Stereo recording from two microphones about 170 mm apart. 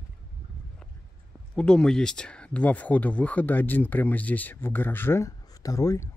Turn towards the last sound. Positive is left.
turn(degrees=15)  # may be behind; listen again after turning